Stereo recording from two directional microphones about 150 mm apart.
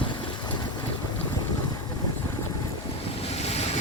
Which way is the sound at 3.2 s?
45° left (ahead or behind).